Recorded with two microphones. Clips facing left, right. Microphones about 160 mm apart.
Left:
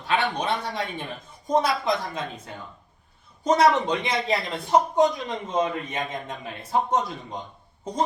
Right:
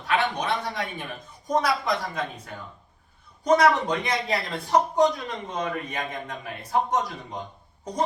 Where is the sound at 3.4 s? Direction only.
25° left (ahead or behind).